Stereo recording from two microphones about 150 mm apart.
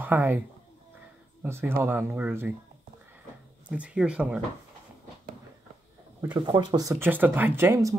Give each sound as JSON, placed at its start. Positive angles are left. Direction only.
{"t": 0.0, "sound": "speech", "side_deg": -10}
{"t": 1.4, "sound": "speech", "side_deg": -15}
{"t": 3.6, "sound": "speech", "side_deg": -10}
{"t": 6.3, "sound": "speech", "side_deg": -30}